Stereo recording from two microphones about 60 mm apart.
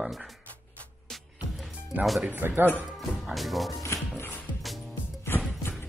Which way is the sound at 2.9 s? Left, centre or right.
Centre.